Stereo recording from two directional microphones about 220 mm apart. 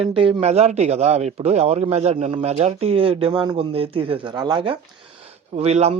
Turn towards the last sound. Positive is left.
turn(degrees=-30)  # may be behind; listen again after turning